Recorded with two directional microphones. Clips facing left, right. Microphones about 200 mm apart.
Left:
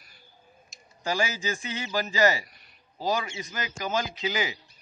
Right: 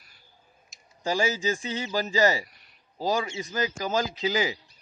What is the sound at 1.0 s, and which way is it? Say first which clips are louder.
A man's voice: right 3 dB; 25° right (ahead or behind).